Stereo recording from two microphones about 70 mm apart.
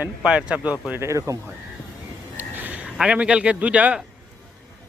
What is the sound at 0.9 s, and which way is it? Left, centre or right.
Speech, right.